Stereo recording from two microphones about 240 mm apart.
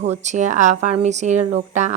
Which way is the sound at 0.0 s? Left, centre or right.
Right.